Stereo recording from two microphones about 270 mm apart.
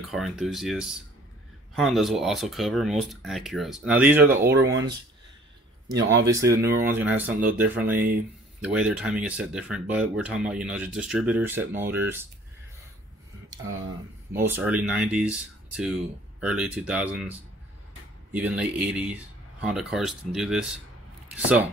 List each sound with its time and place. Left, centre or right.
0.1 s speech: centre
6.4 s speech: right
6.7 s speech: centre
14.5 s speech: centre
18.3 s speech: centre